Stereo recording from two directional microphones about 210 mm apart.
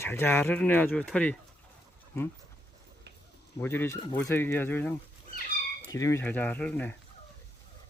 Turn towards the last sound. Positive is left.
turn(degrees=5)  # may be behind; listen again after turning